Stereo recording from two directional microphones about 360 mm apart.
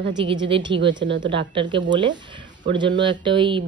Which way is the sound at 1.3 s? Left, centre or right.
Centre.